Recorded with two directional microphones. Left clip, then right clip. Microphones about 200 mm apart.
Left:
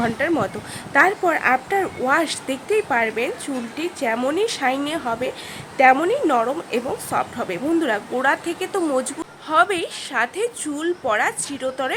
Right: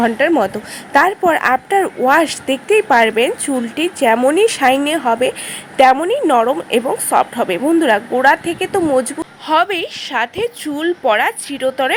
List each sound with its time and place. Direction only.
0.0 s speech: 20° right (ahead or behind)